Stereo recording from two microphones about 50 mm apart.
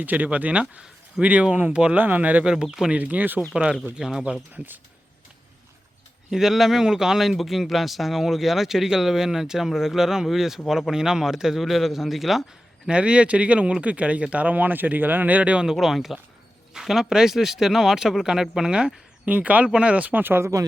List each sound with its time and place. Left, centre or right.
0.0 s speech: right
2.0 s speech: right
2.4 s speech: centre
2.9 s speech: right
3.5 s speech: centre
4.5 s speech: right
6.3 s speech: centre
12.9 s speech: right
15.6 s speech: centre
19.2 s speech: right
20.1 s speech: right